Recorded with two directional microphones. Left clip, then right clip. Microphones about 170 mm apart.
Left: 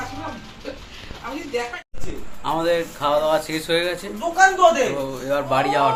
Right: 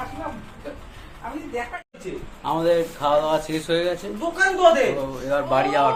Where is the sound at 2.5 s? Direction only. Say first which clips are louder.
Even; 5° left (ahead or behind).